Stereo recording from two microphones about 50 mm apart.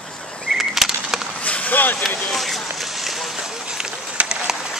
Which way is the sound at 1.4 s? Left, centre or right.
Left.